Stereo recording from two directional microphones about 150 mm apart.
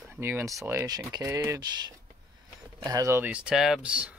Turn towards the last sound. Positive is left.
turn(degrees=-5)  # may be behind; listen again after turning